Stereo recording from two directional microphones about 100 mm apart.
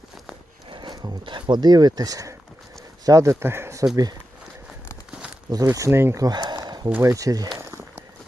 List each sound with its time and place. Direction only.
0.7 s speech: 45° right (ahead or behind); by 3.8 s 30° right (ahead or behind)
3.9 s speech: 40° right (ahead or behind)
5.6 s speech: 30° right (ahead or behind)
6.1 s speech: 40° right (ahead or behind)
6.7 s a sound: 45° right (ahead or behind)
7.0 s speech: 30° right (ahead or behind)
7.6 s a sound: 30° right (ahead or behind)